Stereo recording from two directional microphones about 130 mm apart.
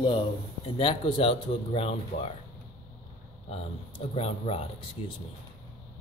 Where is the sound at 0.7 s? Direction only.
40° left (ahead or behind).